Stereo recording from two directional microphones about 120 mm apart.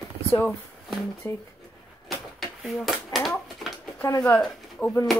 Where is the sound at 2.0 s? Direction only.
Centre (ahead or behind).